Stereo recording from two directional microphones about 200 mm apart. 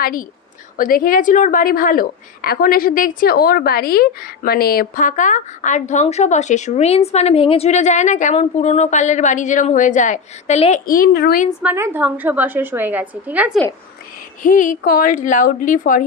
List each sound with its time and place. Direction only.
0.0 s a woman's voice: 45° left (ahead or behind)
11.6 s a woman's voice: 10° right (ahead or behind)
14.4 s a woman's voice: 40° left (ahead or behind)